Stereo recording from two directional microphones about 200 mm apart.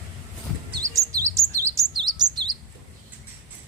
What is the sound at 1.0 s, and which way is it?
Chirp, 15° right (ahead or behind).